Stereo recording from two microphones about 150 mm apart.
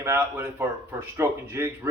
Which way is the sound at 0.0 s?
15° right (ahead or behind).